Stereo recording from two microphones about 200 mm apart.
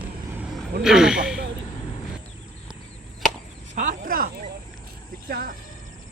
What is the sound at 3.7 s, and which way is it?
Snake, 45° right (ahead or behind).